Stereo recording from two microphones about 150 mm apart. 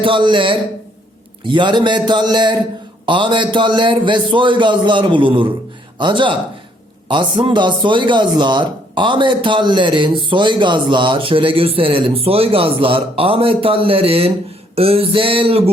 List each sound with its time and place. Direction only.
0.0 s a man's voice: 35° right (ahead or behind)